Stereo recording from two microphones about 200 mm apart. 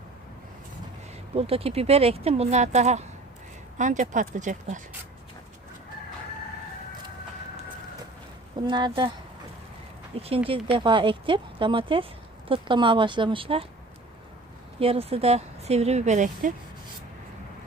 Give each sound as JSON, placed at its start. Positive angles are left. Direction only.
{"t": 1.4, "sound": "speech", "side_deg": -30}
{"t": 8.6, "sound": "speech", "side_deg": -25}
{"t": 10.2, "sound": "speech", "side_deg": -30}
{"t": 14.8, "sound": "speech", "side_deg": -30}